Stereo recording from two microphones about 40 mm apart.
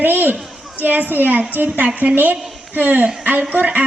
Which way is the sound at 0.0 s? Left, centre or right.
Right.